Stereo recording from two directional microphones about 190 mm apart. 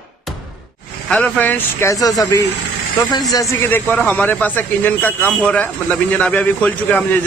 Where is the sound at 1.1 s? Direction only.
5° left (ahead or behind).